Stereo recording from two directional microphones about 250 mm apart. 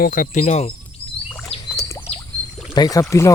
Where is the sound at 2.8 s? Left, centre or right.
Centre.